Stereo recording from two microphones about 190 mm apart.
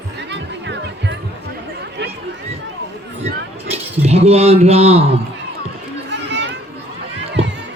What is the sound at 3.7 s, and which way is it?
Speech, 30° right (ahead or behind).